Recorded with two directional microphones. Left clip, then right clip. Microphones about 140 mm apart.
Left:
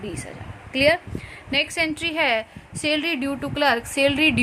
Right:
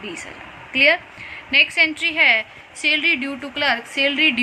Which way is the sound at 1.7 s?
75° left (ahead or behind).